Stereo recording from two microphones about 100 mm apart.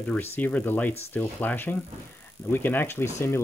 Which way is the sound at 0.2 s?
20° left (ahead or behind).